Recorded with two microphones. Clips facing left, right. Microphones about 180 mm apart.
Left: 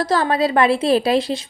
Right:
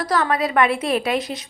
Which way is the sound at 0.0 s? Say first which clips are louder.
Left 3 dB; 30° left (ahead or behind).